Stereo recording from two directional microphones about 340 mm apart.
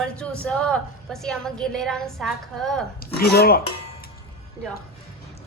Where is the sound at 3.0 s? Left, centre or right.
Left.